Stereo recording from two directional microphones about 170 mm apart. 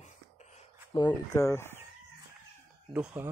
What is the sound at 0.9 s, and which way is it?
Speech, 20° left (ahead or behind).